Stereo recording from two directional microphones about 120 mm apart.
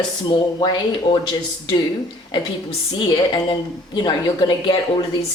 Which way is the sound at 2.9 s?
45° left (ahead or behind).